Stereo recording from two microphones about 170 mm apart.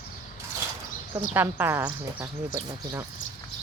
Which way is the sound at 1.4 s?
15° right (ahead or behind).